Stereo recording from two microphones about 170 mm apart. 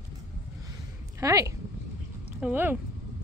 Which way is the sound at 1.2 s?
20° right (ahead or behind).